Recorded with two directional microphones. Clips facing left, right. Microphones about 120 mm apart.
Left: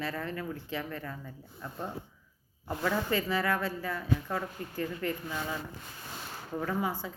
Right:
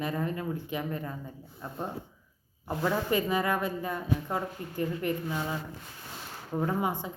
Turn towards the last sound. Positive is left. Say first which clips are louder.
# right 3 dB
turn(degrees=-20)  # may be behind; listen again after turning